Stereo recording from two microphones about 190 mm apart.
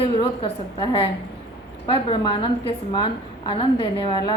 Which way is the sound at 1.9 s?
25° left (ahead or behind).